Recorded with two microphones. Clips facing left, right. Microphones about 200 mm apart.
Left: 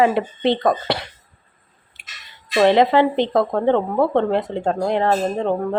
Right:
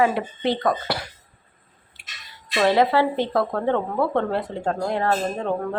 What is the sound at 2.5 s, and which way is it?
Speech, 20° left (ahead or behind).